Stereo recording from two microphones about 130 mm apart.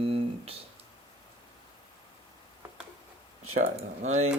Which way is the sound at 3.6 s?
60° right (ahead or behind).